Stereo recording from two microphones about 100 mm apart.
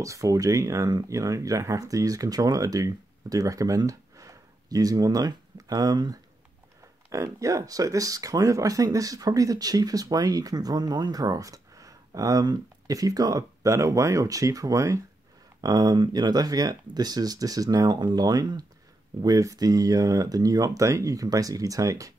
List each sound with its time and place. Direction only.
0.0 s speech: 35° right (ahead or behind)